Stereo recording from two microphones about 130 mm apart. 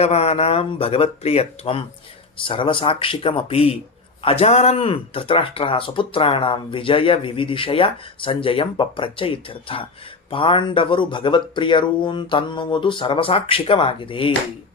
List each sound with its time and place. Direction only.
0.0 s speech: 50° left (ahead or behind)